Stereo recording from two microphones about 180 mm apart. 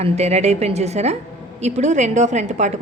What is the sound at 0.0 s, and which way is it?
A woman's voice, 35° right (ahead or behind).